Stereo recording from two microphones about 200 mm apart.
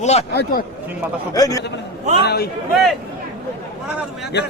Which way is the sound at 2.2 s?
50° left (ahead or behind).